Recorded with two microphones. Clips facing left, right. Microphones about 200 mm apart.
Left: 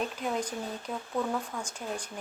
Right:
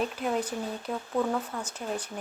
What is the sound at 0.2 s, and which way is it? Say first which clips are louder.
Speech: right 3 dB; 5° right (ahead or behind).